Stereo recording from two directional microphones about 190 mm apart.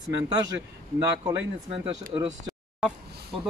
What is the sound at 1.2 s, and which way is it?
Speech, 30° right (ahead or behind).